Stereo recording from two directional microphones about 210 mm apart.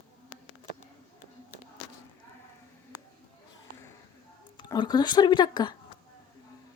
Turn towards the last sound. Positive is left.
turn(degrees=20)  # may be behind; listen again after turning